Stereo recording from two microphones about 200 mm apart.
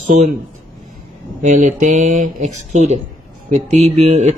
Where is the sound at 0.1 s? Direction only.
35° right (ahead or behind).